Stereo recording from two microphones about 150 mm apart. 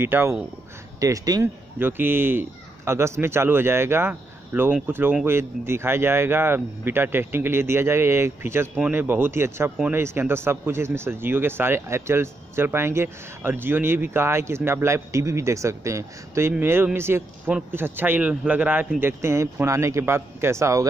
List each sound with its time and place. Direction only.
0.0 s speech: 15° right (ahead or behind)